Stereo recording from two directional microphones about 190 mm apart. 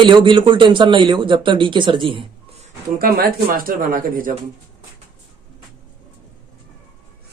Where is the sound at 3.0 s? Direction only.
55° right (ahead or behind).